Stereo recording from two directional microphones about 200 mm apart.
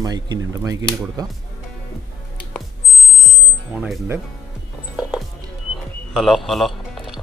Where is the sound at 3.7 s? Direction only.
5° right (ahead or behind).